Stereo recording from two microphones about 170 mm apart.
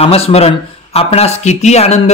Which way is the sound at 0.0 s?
35° left (ahead or behind).